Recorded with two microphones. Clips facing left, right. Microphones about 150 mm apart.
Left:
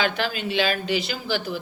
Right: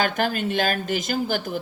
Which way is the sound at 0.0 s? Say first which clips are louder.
Right 2 dB; 45° right (ahead or behind).